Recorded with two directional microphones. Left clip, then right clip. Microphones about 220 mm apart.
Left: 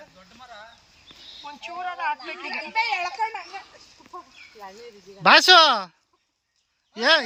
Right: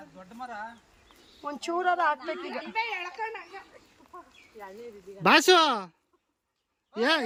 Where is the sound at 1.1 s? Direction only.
5° right (ahead or behind).